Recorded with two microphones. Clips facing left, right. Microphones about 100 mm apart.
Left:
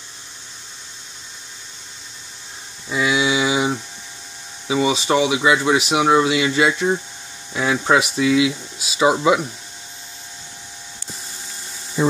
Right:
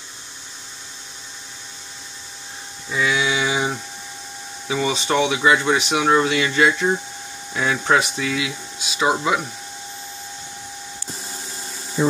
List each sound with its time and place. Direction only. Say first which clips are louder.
2.9 s mantra: left 2 dB; 15° left (ahead or behind)
4.6 s speech: left 3 dB; 10° left (ahead or behind)